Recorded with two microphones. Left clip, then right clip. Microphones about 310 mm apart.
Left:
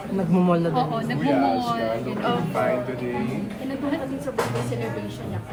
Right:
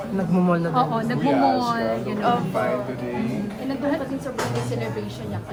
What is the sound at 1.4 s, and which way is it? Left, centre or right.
Speech, right.